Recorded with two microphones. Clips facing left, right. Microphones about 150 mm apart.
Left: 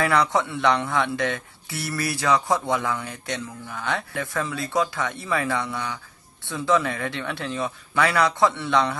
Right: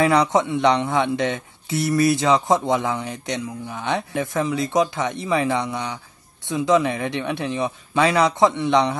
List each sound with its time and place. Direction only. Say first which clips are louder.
0.0 s speech: right 4 dB; 20° right (ahead or behind)